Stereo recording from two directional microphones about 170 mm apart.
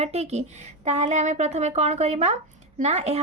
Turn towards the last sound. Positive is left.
turn(degrees=-40)  # may be behind; listen again after turning